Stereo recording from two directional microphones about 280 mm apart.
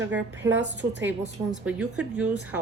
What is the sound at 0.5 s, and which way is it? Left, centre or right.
Speech, right.